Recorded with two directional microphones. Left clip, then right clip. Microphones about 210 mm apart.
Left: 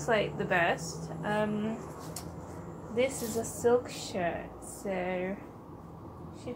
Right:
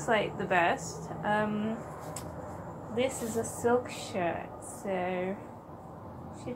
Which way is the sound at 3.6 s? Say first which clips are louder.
Left 2 dB; 5° left (ahead or behind).